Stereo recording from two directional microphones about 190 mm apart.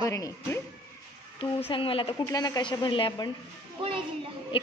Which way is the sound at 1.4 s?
30° left (ahead or behind).